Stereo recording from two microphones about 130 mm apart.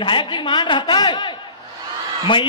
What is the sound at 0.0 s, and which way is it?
A man's voice, 35° left (ahead or behind).